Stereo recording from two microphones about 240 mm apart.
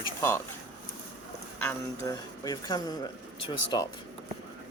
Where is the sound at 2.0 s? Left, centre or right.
Centre.